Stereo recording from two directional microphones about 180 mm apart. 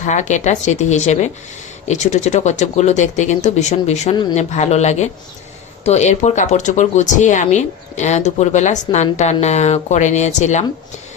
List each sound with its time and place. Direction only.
0.0 s speech: 40° left (ahead or behind)
4.1 s speech: 25° left (ahead or behind)
4.4 s speech: 40° left (ahead or behind)